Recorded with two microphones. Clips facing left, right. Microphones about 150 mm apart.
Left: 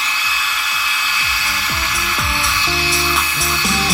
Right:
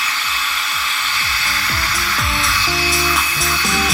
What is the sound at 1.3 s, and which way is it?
Music, 15° left (ahead or behind).